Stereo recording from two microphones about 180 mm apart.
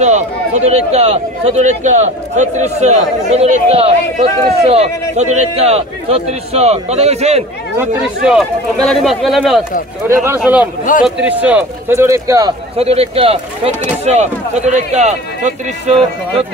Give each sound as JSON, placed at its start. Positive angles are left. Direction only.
{"t": 0.0, "sound": "speech", "side_deg": -40}
{"t": 7.7, "sound": "speech", "side_deg": -10}
{"t": 10.0, "sound": "speech", "side_deg": -15}
{"t": 12.7, "sound": "speech", "side_deg": -35}